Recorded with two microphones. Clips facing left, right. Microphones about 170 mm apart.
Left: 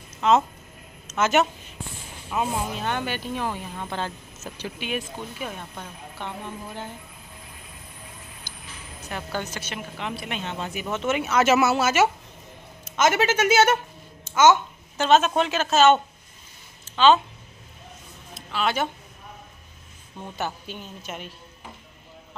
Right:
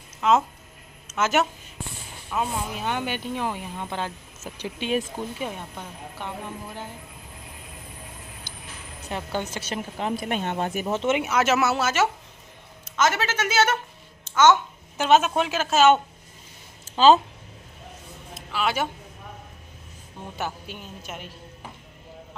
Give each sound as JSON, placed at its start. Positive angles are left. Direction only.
{"t": 0.2, "sound": "a woman's voice", "side_deg": -5}
{"t": 2.7, "sound": "speech", "side_deg": -10}
{"t": 9.1, "sound": "speech", "side_deg": -25}
{"t": 10.9, "sound": "speech", "side_deg": -25}
{"t": 11.3, "sound": "a woman's voice", "side_deg": 0}
{"t": 14.2, "sound": "babbling", "side_deg": 10}
{"t": 15.0, "sound": "speech", "side_deg": -10}
{"t": 16.9, "sound": "speech", "side_deg": -35}
{"t": 18.3, "sound": "a sound", "side_deg": -5}
{"t": 20.3, "sound": "a woman's voice", "side_deg": -5}